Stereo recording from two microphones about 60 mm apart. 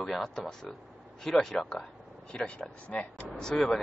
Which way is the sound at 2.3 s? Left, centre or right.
Centre.